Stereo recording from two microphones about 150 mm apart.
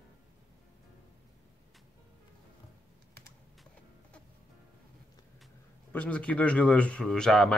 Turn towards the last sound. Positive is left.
turn(degrees=5)  # may be behind; listen again after turning